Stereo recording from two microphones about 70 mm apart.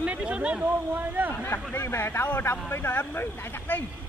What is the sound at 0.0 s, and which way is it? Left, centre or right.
Speech, centre.